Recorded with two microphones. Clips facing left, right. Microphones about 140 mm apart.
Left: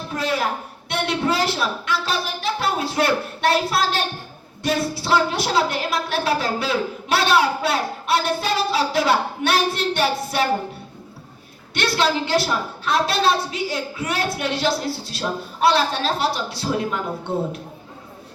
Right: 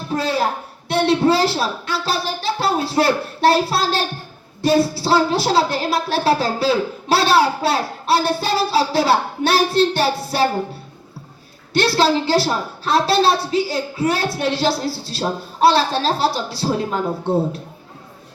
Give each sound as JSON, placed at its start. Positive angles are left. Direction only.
{"t": 0.1, "sound": "a sound", "side_deg": -30}
{"t": 0.9, "sound": "a woman's voice", "side_deg": -30}
{"t": 11.7, "sound": "a woman's voice", "side_deg": -30}